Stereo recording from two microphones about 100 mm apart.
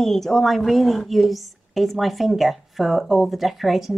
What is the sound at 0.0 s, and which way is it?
A woman's voice, 5° left (ahead or behind).